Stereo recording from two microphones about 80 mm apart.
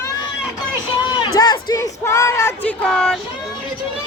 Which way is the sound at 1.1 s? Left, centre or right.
Left.